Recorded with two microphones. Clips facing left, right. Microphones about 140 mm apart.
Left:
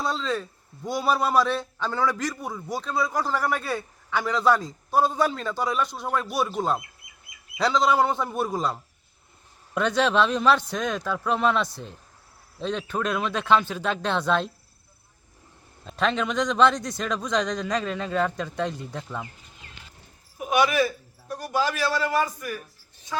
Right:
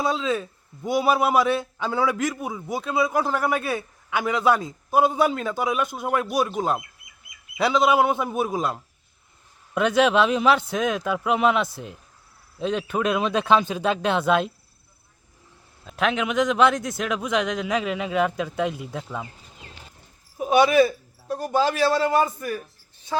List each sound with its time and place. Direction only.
0.0 s a man's voice: 5° right (ahead or behind)
15.8 s a man's voice: 5° right (ahead or behind)
20.4 s a man's voice: 30° right (ahead or behind)